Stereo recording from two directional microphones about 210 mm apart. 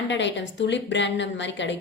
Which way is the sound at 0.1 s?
60° left (ahead or behind).